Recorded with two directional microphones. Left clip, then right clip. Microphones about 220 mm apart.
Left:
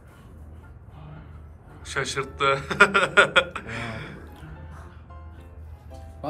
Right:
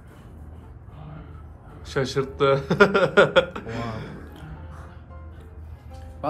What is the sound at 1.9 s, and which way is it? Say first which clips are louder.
A man's voice: right 2 dB; 20° right (ahead or behind).